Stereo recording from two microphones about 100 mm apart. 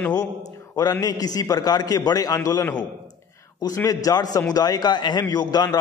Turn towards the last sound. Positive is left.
turn(degrees=40)  # may be behind; listen again after turning